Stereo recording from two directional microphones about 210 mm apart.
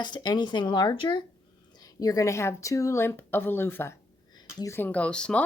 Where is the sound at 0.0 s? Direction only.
20° left (ahead or behind).